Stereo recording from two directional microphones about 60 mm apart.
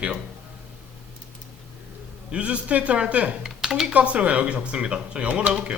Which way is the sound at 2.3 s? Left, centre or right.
Centre.